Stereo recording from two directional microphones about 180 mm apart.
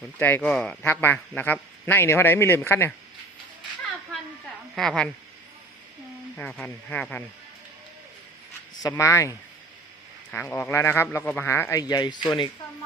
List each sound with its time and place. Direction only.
0.2 s a man's voice: 10° left (ahead or behind)
4.7 s a woman's voice: 5° left (ahead or behind)
6.3 s a man's voice: 5° left (ahead or behind)
8.8 s a man's voice: 15° left (ahead or behind)
10.3 s a man's voice: 10° left (ahead or behind); by 12.5 s 25° left (ahead or behind)